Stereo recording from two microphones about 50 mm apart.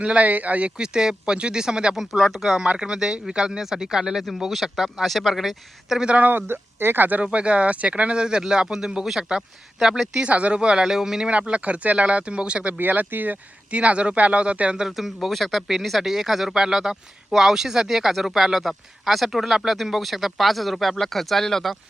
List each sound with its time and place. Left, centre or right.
0.0 s speech: right
0.8 s speech: centre
6.1 s speech: right
6.5 s speech: right
7.2 s speech: right; by 10.1 s centre
10.2 s speech: right; by 11.3 s centre
11.3 s speech: right
12.8 s speech: right
13.7 s speech: right
14.9 s speech: centre